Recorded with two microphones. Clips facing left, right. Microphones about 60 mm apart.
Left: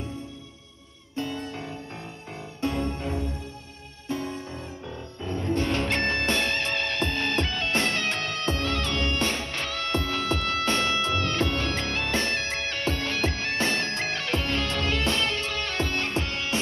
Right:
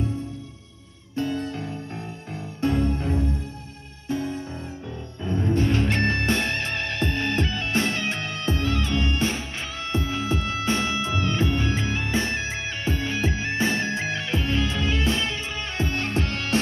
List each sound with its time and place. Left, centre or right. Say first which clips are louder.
1.1 s music: right 5 dB; right
1.5 s music: right 3 dB; left
5.2 s music: right 3 dB; right